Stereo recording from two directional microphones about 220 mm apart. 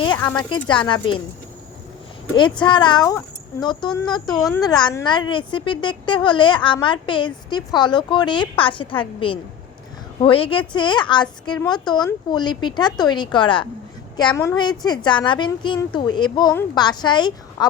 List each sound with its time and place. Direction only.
0.0 s a woman's voice: 15° left (ahead or behind)
2.3 s a woman's voice: 20° left (ahead or behind)